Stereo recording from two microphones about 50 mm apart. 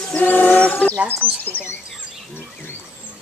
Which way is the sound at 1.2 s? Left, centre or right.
Right.